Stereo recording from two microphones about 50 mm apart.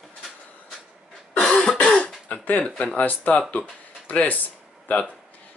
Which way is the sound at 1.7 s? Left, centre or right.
Centre.